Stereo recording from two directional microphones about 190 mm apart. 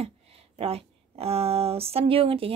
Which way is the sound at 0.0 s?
30° right (ahead or behind).